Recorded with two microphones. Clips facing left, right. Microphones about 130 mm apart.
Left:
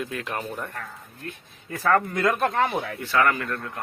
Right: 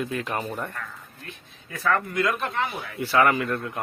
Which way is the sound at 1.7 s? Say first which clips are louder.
Left 3 dB; 35° left (ahead or behind).